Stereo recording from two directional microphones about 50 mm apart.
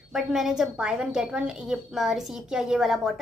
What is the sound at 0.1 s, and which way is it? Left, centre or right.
A woman's voice, centre.